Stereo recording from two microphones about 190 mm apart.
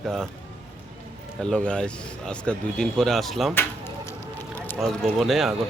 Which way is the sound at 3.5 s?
15° left (ahead or behind).